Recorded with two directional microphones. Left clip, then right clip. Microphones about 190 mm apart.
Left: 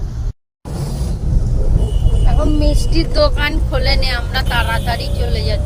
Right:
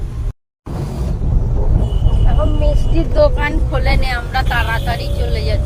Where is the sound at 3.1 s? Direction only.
10° right (ahead or behind).